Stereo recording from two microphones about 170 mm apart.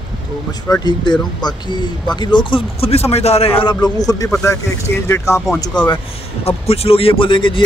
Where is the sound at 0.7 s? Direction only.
25° left (ahead or behind).